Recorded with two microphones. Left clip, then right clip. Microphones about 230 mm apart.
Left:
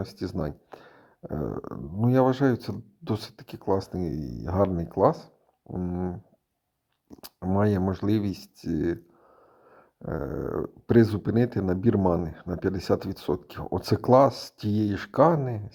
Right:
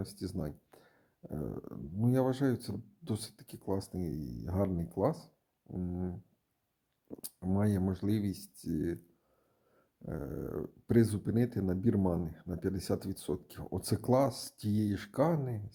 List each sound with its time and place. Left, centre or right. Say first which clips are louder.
0.0 s speech: left 9 dB; centre
7.2 s speech: left 10 dB; centre